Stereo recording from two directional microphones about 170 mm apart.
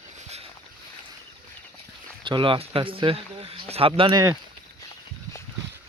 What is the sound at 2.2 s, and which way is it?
Speech, 30° right (ahead or behind).